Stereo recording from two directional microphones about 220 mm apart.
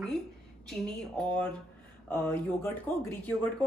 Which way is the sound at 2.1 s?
10° left (ahead or behind).